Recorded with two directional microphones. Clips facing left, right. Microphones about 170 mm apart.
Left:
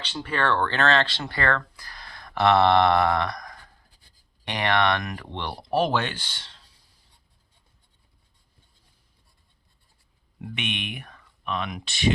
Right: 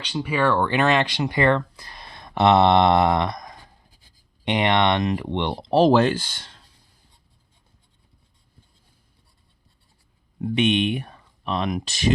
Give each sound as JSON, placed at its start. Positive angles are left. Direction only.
{"t": 0.0, "sound": "speech", "side_deg": -10}
{"t": 5.8, "sound": "speech", "side_deg": -35}
{"t": 10.4, "sound": "speech", "side_deg": -35}